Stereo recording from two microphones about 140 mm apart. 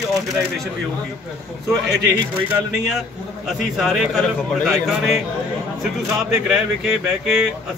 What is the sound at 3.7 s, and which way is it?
Speech, centre (ahead or behind).